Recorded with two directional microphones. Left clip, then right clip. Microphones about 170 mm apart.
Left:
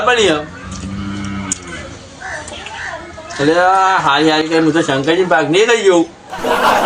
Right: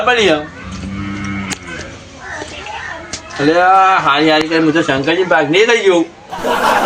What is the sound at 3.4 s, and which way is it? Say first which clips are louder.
Speech: right 2 dB; 5° left (ahead or behind).